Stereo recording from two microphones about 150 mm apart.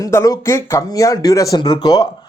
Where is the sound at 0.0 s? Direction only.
20° left (ahead or behind).